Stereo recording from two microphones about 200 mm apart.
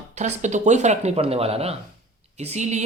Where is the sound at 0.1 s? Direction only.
35° right (ahead or behind).